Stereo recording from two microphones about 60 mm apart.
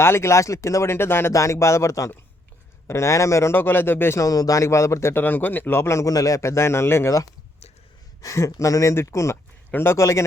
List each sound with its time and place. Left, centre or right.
0.0 s speech: left
1.3 s speech: left
3.5 s a man's voice: left
4.2 s speech: left
5.2 s a man's voice: left
6.1 s speech: left
8.2 s speech: left
10.0 s speech: left